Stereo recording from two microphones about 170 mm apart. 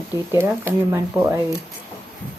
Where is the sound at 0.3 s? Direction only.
15° right (ahead or behind).